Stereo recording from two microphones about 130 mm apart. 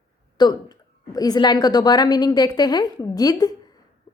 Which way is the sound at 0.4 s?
35° left (ahead or behind).